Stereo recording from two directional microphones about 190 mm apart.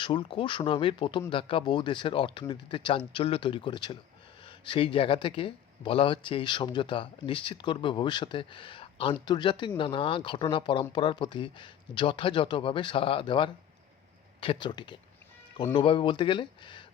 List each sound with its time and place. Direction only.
0.0 s speech: 25° left (ahead or behind)